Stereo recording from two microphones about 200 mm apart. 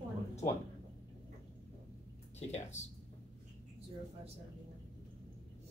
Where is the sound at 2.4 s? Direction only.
35° left (ahead or behind).